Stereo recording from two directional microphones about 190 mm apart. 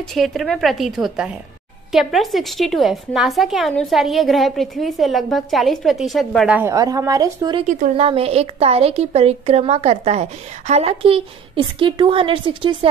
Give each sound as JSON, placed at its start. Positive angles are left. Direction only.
{"t": 0.1, "sound": "a woman's voice", "side_deg": 0}